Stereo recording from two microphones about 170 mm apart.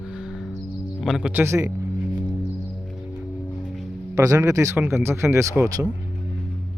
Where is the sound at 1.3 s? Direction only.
15° right (ahead or behind).